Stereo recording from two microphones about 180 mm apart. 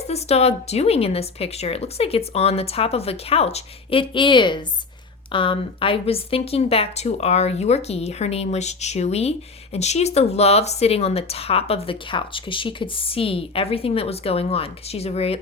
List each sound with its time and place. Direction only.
0.1 s speech: 35° left (ahead or behind)